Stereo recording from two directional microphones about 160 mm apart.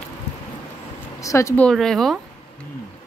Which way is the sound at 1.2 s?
20° left (ahead or behind).